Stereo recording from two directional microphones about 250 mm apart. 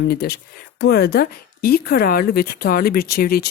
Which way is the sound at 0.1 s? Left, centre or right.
Left.